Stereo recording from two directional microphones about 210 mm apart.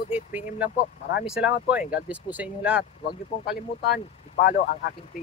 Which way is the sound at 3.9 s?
40° left (ahead or behind).